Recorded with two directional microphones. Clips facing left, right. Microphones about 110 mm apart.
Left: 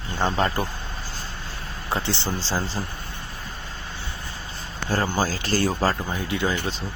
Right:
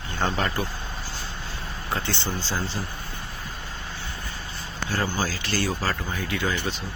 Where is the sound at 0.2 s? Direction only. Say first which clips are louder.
Left 3 dB; 25° left (ahead or behind).